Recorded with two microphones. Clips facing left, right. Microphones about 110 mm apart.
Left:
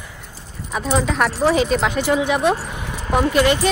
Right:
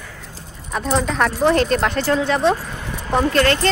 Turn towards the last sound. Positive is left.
turn(degrees=10)  # may be behind; listen again after turning